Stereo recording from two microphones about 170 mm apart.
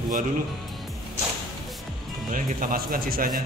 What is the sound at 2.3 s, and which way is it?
Speech, 55° right (ahead or behind).